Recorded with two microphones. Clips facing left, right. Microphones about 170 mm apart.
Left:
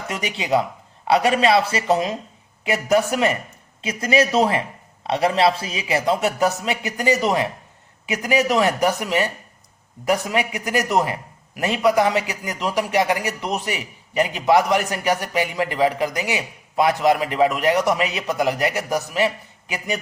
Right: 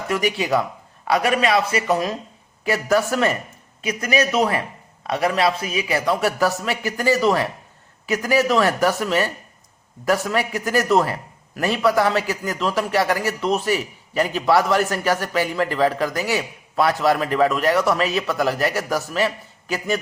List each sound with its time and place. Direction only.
0.1 s a man's voice: 20° left (ahead or behind)